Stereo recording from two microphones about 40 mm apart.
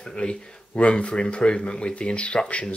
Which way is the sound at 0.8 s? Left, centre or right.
Left.